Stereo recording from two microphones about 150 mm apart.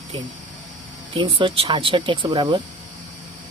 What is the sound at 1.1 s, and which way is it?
Speech, 35° right (ahead or behind).